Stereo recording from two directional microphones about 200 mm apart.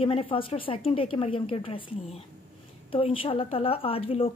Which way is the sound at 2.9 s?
25° left (ahead or behind).